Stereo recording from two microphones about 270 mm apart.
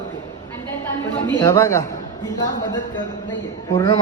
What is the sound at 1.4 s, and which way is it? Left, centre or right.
Speech, centre.